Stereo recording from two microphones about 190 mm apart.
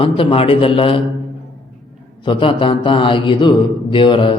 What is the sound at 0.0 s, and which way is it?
A man's voice, 30° left (ahead or behind).